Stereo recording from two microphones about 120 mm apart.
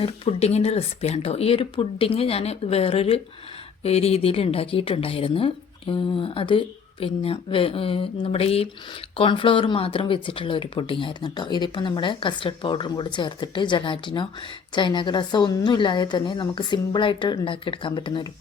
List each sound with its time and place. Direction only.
0.0 s speech: 55° left (ahead or behind)
9.1 s a woman's voice: 45° left (ahead or behind)